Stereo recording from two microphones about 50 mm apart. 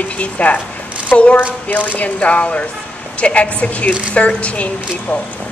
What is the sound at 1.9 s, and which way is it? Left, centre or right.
A woman's voice, left.